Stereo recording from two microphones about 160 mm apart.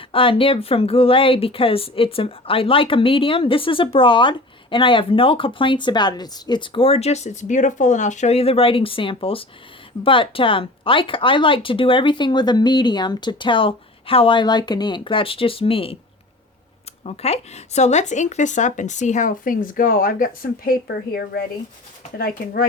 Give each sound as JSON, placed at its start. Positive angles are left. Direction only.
{"t": 0.1, "sound": "speech", "side_deg": 35}
{"t": 17.0, "sound": "speech", "side_deg": 40}